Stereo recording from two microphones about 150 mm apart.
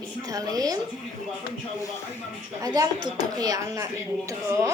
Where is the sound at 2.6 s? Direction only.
25° right (ahead or behind).